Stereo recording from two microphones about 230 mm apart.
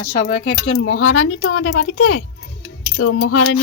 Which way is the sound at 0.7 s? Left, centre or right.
Left.